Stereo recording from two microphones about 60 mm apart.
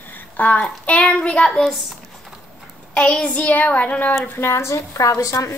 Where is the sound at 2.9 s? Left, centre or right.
Centre.